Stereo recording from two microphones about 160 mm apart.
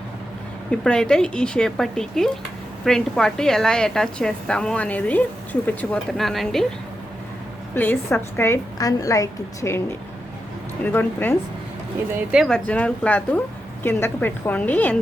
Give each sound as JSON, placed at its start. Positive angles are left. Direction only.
{"t": 0.7, "sound": "a woman's voice", "side_deg": 5}
{"t": 7.8, "sound": "a woman's voice", "side_deg": 10}
{"t": 10.8, "sound": "a woman's voice", "side_deg": 10}
{"t": 12.1, "sound": "speech", "side_deg": -5}
{"t": 12.5, "sound": "a woman's voice", "side_deg": 5}